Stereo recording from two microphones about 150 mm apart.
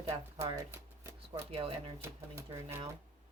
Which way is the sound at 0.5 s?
15° right (ahead or behind).